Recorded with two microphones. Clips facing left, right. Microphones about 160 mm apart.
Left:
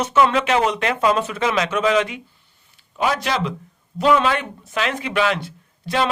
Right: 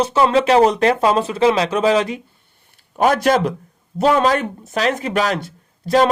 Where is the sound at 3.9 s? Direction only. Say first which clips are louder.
Right 2 dB; 40° right (ahead or behind).